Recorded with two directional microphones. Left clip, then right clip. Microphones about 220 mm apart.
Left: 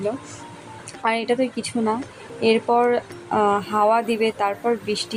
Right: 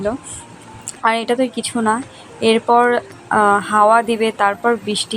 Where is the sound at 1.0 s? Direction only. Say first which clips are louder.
Right 5 dB; 5° right (ahead or behind).